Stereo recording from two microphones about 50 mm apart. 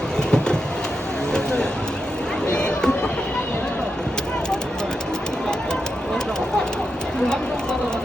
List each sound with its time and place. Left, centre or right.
0.3 s train: centre
2.6 s run: centre